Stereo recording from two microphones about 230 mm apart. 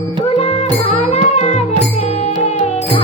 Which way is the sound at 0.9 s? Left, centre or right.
Left.